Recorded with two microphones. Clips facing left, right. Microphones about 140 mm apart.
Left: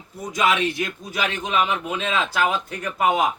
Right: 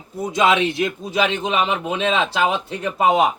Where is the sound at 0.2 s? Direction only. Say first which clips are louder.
Right 4 dB; 25° right (ahead or behind).